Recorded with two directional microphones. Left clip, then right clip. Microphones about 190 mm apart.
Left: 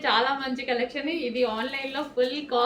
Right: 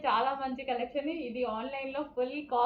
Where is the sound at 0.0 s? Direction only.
25° left (ahead or behind).